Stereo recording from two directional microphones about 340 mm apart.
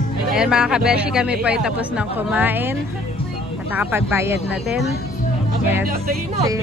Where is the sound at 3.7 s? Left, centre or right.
Centre.